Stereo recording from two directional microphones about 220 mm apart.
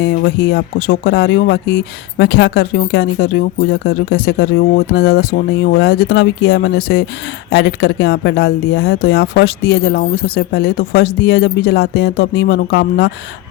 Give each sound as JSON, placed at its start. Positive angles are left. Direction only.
{"t": 0.5, "sound": "speech", "side_deg": 45}